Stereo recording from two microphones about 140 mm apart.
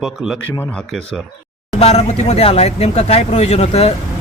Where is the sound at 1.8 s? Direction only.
50° left (ahead or behind).